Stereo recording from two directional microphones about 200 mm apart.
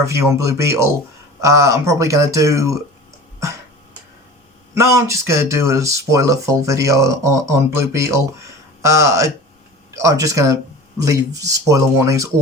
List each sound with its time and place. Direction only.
0.0 s speech: 15° right (ahead or behind)
4.7 s speech: 15° right (ahead or behind)